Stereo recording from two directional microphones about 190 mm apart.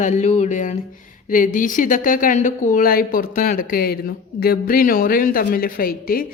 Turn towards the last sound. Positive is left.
turn(degrees=50)  # may be behind; listen again after turning